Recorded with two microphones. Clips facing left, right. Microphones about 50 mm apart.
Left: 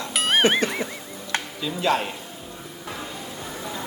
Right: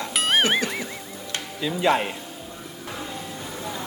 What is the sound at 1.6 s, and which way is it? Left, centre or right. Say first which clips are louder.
Speech: right 3 dB; centre.